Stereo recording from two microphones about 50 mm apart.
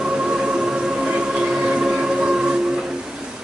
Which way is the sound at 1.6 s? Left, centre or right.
Centre.